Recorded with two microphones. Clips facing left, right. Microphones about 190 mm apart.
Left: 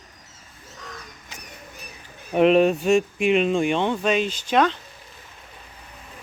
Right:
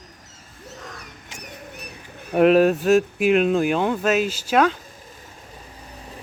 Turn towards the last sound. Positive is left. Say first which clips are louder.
# right 1 dB
turn(degrees=-5)  # may be behind; listen again after turning